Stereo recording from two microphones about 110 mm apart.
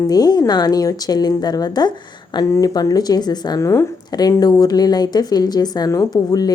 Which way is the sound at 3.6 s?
25° left (ahead or behind).